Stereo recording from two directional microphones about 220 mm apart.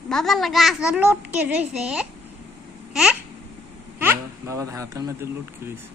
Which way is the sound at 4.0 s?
10° right (ahead or behind).